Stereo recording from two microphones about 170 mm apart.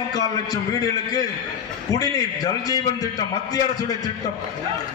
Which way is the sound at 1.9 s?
20° left (ahead or behind).